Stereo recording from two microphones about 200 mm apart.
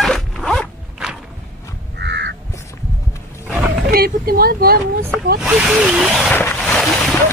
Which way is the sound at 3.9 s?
50° right (ahead or behind).